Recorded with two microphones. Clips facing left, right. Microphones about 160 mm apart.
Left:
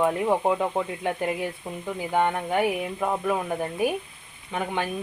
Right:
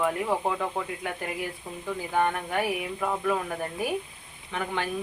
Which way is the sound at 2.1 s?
20° left (ahead or behind).